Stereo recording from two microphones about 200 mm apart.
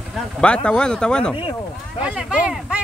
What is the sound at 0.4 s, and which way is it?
Speech, 5° left (ahead or behind).